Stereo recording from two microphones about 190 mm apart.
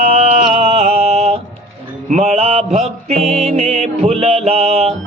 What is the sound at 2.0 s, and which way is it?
Music, 35° right (ahead or behind).